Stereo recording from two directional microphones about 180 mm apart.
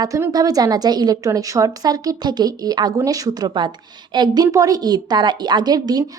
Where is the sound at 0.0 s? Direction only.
20° right (ahead or behind).